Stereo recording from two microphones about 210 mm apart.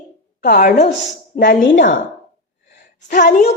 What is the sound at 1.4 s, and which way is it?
Speech, 55° left (ahead or behind).